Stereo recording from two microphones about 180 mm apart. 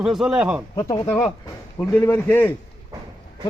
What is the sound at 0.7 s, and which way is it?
Speech, 25° left (ahead or behind).